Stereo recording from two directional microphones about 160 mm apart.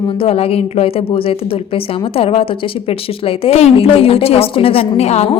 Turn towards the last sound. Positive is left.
turn(degrees=40)  # may be behind; listen again after turning